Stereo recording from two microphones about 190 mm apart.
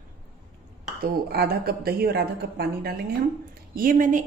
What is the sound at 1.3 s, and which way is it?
Speech, 55° right (ahead or behind).